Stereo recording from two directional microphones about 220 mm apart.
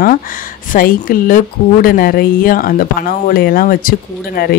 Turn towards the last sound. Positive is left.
turn(degrees=45)  # may be behind; listen again after turning